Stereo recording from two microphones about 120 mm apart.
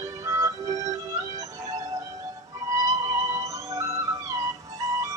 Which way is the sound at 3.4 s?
25° right (ahead or behind).